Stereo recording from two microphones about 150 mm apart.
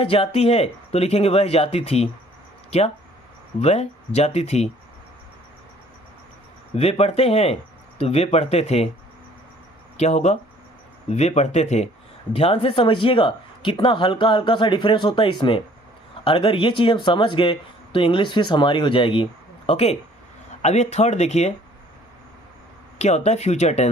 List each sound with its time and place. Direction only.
0.0 s speech: 40° left (ahead or behind)
6.7 s speech: 40° left (ahead or behind)
10.0 s speech: 45° left (ahead or behind)
23.0 s speech: 50° left (ahead or behind)